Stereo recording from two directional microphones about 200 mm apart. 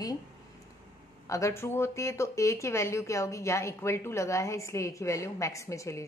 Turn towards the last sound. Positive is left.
turn(degrees=15)  # may be behind; listen again after turning